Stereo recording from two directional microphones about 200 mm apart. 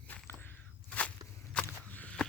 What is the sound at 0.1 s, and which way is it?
Walk, 10° left (ahead or behind).